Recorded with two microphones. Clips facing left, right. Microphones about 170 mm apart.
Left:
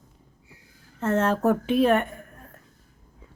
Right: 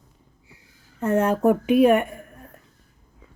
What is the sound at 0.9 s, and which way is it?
Speech, 15° right (ahead or behind).